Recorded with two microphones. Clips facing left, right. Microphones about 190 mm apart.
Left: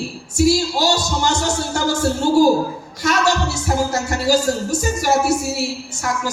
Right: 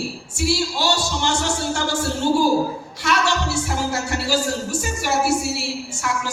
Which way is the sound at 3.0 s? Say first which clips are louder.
Left 3 dB; 40° left (ahead or behind).